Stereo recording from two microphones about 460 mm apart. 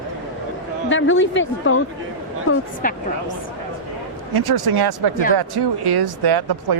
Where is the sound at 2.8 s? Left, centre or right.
Centre.